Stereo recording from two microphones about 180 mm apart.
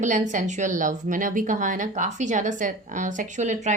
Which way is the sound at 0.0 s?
45° right (ahead or behind).